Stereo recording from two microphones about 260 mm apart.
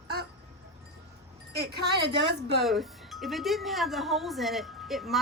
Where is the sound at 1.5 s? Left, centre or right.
Right.